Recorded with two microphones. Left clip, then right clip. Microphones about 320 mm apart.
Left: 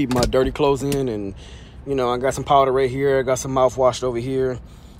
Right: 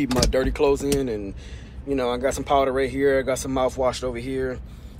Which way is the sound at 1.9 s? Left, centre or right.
Left.